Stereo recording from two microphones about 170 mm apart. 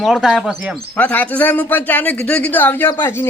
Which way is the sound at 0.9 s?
10° left (ahead or behind).